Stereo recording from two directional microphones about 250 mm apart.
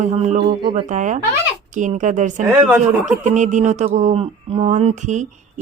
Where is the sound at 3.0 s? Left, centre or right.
Right.